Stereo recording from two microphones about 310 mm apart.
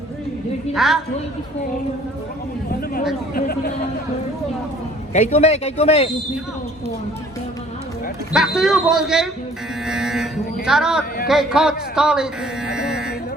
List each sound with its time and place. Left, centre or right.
0.7 s a man's voice: centre
3.3 s a man's voice: left
5.1 s a man's voice: left
8.3 s a man's voice: centre